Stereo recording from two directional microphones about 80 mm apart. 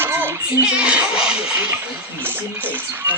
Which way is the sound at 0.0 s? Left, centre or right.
Right.